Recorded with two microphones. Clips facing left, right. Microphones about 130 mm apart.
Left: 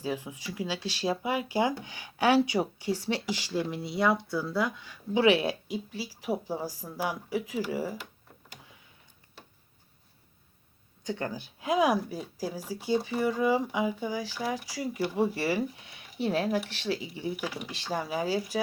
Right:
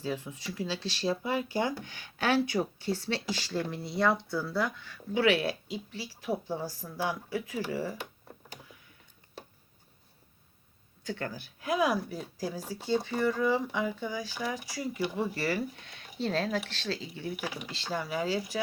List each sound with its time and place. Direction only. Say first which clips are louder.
0.0 s speech: left 1 dB; 15° left (ahead or behind)
11.0 s speech: left 3 dB; 15° left (ahead or behind)